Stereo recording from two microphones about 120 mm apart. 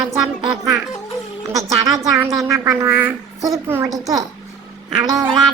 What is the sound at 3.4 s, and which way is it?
A woman's voice, 25° right (ahead or behind).